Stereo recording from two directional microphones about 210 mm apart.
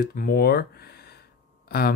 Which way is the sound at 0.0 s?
45° left (ahead or behind).